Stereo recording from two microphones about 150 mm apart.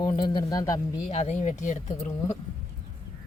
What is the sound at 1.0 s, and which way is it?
Speech, 50° left (ahead or behind).